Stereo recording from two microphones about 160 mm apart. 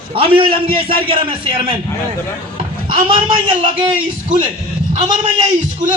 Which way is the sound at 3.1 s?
30° right (ahead or behind).